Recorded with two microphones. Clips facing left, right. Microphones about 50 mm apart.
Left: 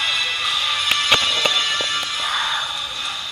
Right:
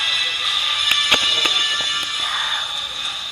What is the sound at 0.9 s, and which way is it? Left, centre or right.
Music, left.